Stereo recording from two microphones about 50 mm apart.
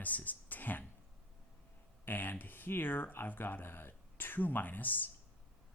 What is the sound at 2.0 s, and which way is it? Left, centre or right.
Speech, left.